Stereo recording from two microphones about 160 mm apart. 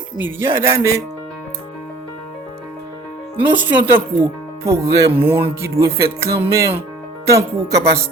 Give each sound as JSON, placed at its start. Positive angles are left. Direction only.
{"t": 0.2, "sound": "music", "side_deg": -15}
{"t": 3.5, "sound": "music", "side_deg": -10}
{"t": 7.3, "sound": "speech", "side_deg": -20}